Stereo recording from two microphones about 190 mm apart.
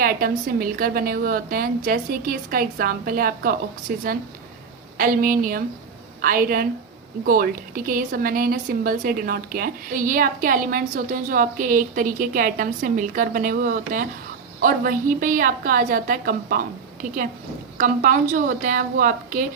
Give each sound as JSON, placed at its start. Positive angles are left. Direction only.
{"t": 0.0, "sound": "a woman's voice", "side_deg": -50}